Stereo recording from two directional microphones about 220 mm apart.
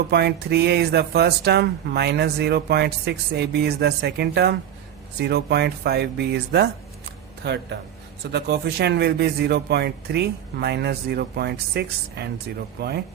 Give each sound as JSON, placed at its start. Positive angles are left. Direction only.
{"t": 0.1, "sound": "speech", "side_deg": -45}